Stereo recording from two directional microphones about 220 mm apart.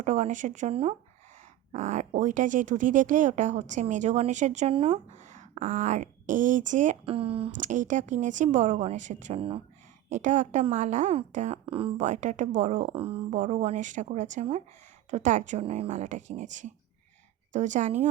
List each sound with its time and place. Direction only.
0.0 s speech: 35° right (ahead or behind)